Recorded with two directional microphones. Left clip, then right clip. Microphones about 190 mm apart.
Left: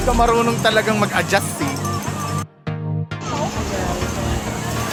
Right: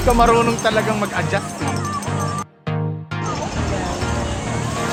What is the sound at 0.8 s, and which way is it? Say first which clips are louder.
Speech: left 2 dB; 50° left (ahead or behind).